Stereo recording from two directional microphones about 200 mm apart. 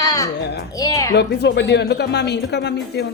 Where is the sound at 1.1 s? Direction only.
60° left (ahead or behind).